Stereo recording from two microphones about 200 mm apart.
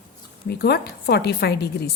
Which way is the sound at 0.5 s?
55° left (ahead or behind).